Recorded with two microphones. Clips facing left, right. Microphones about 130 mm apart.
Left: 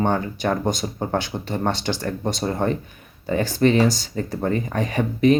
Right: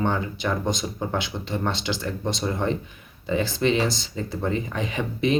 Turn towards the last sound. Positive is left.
turn(degrees=45)  # may be behind; listen again after turning